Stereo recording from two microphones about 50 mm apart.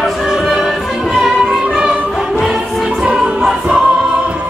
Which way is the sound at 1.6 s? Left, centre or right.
Right.